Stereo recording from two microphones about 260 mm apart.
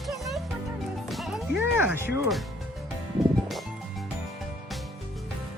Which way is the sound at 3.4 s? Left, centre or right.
Centre.